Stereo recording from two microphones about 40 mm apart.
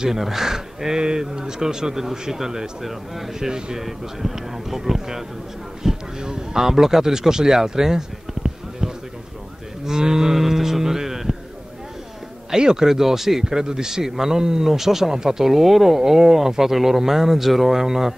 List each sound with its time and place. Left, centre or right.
0.1 s speech: centre
5.8 s music: centre
6.2 s speech: centre
12.4 s speech: centre